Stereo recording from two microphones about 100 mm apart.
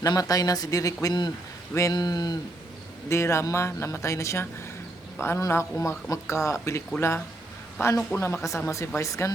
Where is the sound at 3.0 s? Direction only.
30° left (ahead or behind).